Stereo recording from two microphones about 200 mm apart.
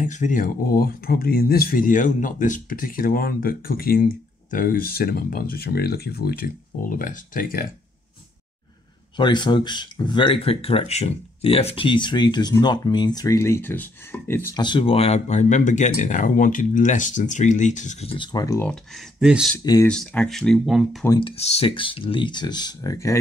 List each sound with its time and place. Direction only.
0.0 s speech: 40° left (ahead or behind)
9.1 s speech: 25° left (ahead or behind)
14.6 s speech: 25° left (ahead or behind)
18.1 s speech: 20° left (ahead or behind)
18.7 s speech: centre (ahead or behind)
19.6 s speech: 20° left (ahead or behind)
19.9 s speech: 5° left (ahead or behind)
21.2 s speech: 30° left (ahead or behind)